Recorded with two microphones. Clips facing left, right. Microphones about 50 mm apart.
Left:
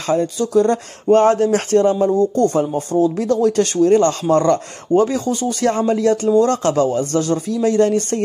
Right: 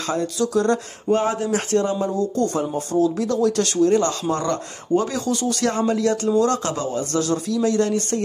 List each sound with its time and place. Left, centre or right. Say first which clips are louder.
0.0 s speech: left 4 dB; left
1.1 s a man's voice: left 8 dB; left
5.0 s a man's voice: left 4 dB; left